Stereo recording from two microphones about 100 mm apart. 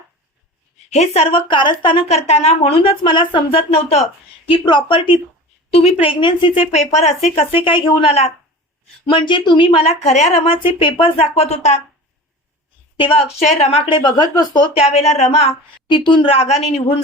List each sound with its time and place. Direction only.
0.9 s speech: 90° left; by 3.6 s 55° left (ahead or behind)
3.7 s speech: 85° left
4.4 s a woman's voice: 55° left (ahead or behind); by 8.3 s 80° left
9.0 s a woman's voice: 55° left (ahead or behind); by 11.6 s 90° left
13.0 s a woman's voice: 80° left
14.1 s speech: 45° left (ahead or behind)
14.7 s a woman's voice: 80° left
15.9 s speech: 50° left (ahead or behind)
16.3 s a woman's voice: 90° left